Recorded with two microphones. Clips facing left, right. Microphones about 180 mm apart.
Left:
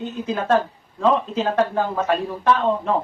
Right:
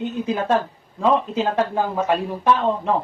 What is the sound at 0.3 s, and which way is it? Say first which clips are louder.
Speech: even; 15° right (ahead or behind).